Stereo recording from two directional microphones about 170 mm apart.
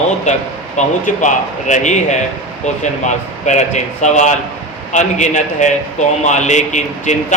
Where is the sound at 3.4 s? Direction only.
45° left (ahead or behind).